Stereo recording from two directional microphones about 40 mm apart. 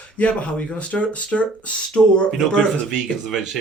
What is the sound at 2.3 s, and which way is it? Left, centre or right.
Speech, centre.